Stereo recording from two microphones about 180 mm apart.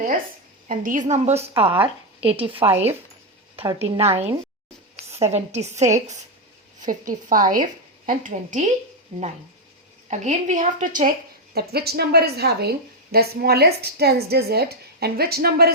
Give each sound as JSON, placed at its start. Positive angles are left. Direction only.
{"t": 0.7, "sound": "a woman's voice", "side_deg": -50}
{"t": 2.6, "sound": "speech", "side_deg": -10}
{"t": 3.5, "sound": "a woman's voice", "side_deg": -30}
{"t": 5.3, "sound": "a woman's voice", "side_deg": -40}
{"t": 10.1, "sound": "speech", "side_deg": -40}
{"t": 11.5, "sound": "a woman's voice", "side_deg": -60}